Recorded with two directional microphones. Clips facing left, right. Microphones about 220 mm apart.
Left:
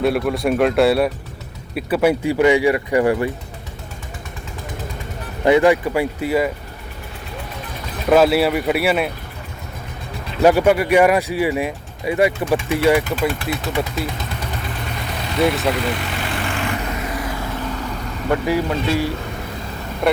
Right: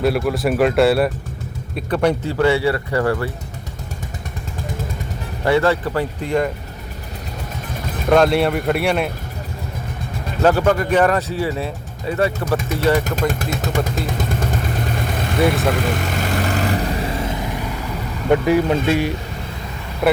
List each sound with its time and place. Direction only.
0.0 s speech: centre (ahead or behind); by 3.3 s 15° left (ahead or behind)
5.5 s speech: 15° left (ahead or behind)
8.1 s speech: 5° left (ahead or behind)
10.4 s speech: 10° left (ahead or behind)
13.1 s speech: 45° right (ahead or behind)
15.4 s speech: centre (ahead or behind)
15.8 s speech: 45° right (ahead or behind)
16.5 s vehicle: 40° right (ahead or behind); by 17.5 s 20° right (ahead or behind)
18.3 s speech: 20° right (ahead or behind)